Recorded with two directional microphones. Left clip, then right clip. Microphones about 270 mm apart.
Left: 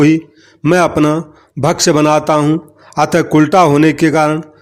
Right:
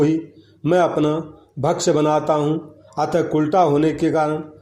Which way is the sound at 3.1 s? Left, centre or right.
Left.